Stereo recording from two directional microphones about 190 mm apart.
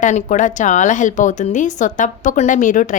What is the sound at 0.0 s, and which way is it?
A woman's voice, 40° left (ahead or behind).